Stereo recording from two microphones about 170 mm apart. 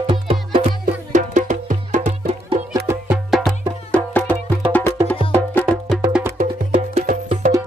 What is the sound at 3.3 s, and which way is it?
Music, 5° left (ahead or behind).